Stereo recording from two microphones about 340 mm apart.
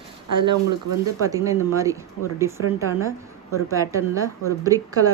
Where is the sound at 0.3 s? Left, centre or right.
Centre.